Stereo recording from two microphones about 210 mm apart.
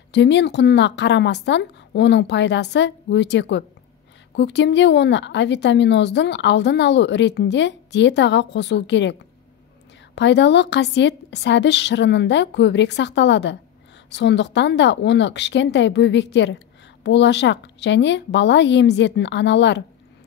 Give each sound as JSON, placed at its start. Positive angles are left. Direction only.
{"t": 0.1, "sound": "a woman's voice", "side_deg": 55}
{"t": 10.1, "sound": "a woman's voice", "side_deg": 55}